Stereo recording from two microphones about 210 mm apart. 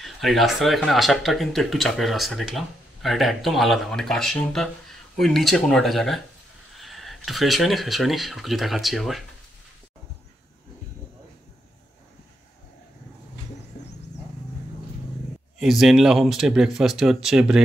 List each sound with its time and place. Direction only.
0.0 s speech: centre (ahead or behind)
15.6 s speech: centre (ahead or behind)